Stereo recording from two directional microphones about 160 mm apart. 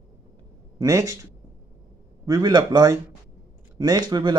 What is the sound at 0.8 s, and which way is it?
Speech, 20° right (ahead or behind).